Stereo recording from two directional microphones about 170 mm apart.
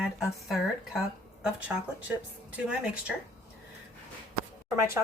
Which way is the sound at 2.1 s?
10° right (ahead or behind).